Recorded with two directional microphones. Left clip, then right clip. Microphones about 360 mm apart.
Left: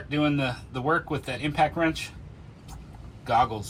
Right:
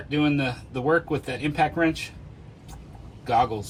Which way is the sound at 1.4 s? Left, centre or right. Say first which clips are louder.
Even; left.